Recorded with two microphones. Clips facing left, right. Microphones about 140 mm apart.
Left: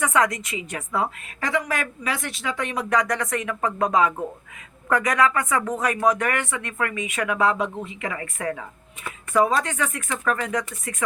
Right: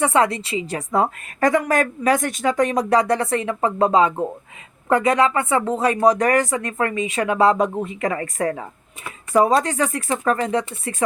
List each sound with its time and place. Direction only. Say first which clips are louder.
0.0 s a woman's voice: right 4 dB; 30° right (ahead or behind)